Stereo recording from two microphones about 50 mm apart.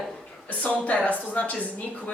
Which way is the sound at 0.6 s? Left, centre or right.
Left.